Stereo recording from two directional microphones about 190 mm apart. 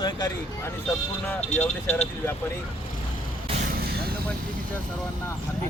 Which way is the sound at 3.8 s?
55° right (ahead or behind).